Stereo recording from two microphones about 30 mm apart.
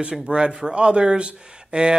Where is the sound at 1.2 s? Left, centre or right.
Right.